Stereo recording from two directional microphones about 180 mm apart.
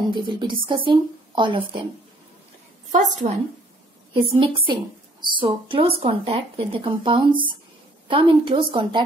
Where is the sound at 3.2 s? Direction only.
40° right (ahead or behind).